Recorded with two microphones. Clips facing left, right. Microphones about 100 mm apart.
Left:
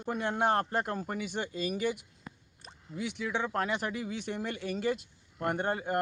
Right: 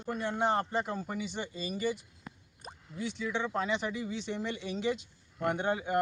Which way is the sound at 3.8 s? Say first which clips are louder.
Even; 60° left (ahead or behind).